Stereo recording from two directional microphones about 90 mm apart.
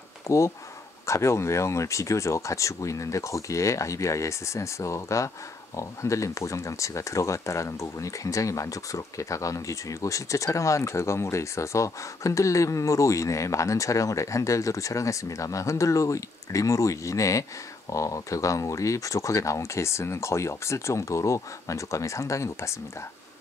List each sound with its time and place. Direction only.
0.3 s speech: 35° left (ahead or behind)